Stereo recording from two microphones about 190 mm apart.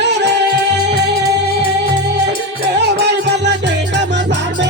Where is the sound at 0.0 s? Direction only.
65° right (ahead or behind).